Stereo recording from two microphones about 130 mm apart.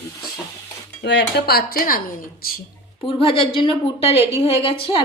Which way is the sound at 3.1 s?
45° left (ahead or behind).